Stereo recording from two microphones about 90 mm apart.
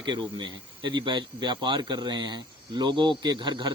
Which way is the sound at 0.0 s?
60° right (ahead or behind).